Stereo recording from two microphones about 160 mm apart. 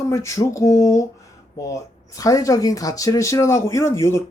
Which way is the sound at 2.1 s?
20° left (ahead or behind).